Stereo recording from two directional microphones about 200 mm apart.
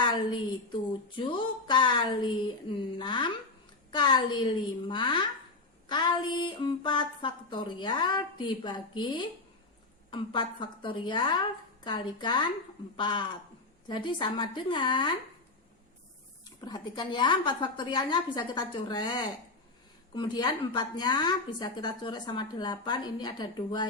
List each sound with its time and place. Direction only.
0.0 s a woman's voice: 25° left (ahead or behind)
16.4 s a woman's voice: 20° left (ahead or behind)